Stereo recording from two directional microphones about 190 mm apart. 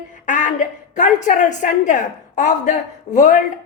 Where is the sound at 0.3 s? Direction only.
40° left (ahead or behind).